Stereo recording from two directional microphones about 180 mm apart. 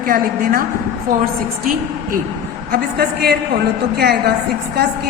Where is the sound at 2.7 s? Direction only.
55° right (ahead or behind).